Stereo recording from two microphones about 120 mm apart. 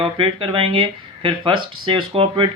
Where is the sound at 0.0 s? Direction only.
45° right (ahead or behind).